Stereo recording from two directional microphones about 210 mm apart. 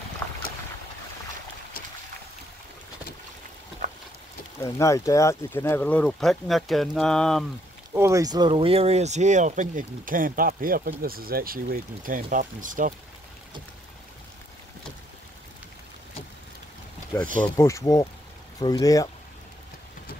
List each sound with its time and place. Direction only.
4.6 s speech: 15° left (ahead or behind)
7.9 s speech: 15° right (ahead or behind); by 12.9 s 40° right (ahead or behind)
17.6 s speech: 15° left (ahead or behind)